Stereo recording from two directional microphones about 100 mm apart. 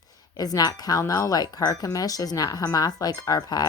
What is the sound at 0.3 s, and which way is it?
A woman's voice, 40° left (ahead or behind).